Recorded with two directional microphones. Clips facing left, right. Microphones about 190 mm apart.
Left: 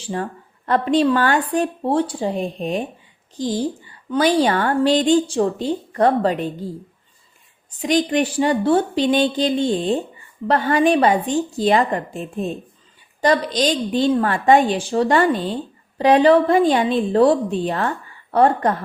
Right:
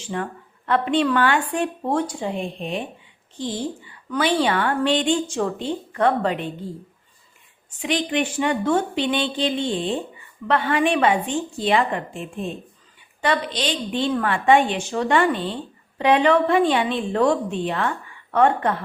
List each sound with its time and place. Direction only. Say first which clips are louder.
0.0 s a woman's voice: left 2 dB; 35° left (ahead or behind)
7.7 s a woman's voice: left 5 dB; 40° left (ahead or behind)